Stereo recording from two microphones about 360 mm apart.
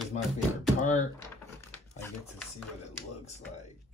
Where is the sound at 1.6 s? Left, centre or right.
Centre.